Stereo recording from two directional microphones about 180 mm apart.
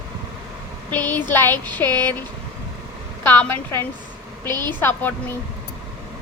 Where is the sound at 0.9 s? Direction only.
10° left (ahead or behind).